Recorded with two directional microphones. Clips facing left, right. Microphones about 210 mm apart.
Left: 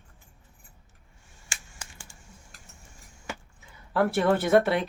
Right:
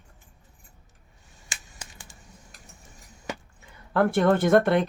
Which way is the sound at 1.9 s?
20° right (ahead or behind).